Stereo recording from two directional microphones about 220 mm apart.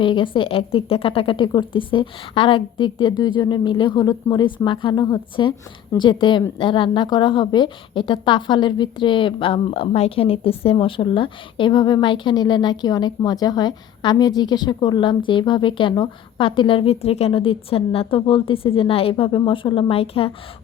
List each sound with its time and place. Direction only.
0.0 s a woman's voice: 20° left (ahead or behind)